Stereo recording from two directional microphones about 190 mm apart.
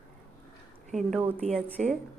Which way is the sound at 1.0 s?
Centre (ahead or behind).